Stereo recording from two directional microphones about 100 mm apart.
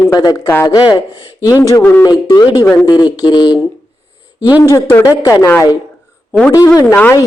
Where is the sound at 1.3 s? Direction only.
30° left (ahead or behind).